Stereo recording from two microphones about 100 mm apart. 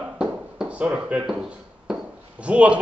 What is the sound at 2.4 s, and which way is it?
Speech, 10° right (ahead or behind).